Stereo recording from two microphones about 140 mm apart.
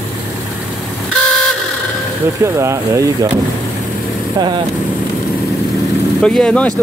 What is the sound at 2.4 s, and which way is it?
Speech, 20° right (ahead or behind).